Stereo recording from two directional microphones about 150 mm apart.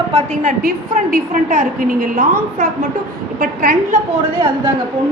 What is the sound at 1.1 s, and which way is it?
A woman's voice, 65° right (ahead or behind).